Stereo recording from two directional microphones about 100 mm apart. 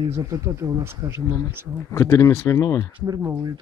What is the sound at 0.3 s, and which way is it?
Speech, 35° right (ahead or behind).